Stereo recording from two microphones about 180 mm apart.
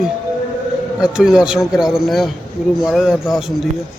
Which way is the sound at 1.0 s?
5° right (ahead or behind).